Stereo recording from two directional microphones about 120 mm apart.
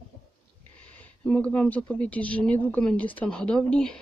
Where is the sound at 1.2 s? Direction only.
10° left (ahead or behind).